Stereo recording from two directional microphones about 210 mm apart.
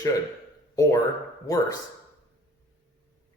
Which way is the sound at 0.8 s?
15° left (ahead or behind).